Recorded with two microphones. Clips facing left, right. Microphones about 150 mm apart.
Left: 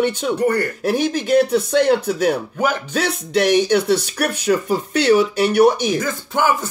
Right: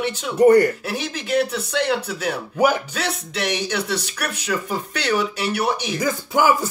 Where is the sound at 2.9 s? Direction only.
40° left (ahead or behind).